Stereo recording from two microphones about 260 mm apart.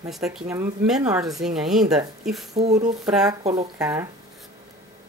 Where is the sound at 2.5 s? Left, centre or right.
Right.